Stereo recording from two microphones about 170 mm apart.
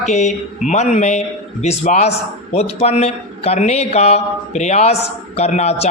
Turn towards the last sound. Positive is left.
turn(degrees=40)  # may be behind; listen again after turning